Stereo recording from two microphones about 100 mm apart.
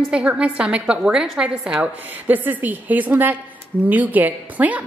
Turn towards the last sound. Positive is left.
turn(degrees=-15)  # may be behind; listen again after turning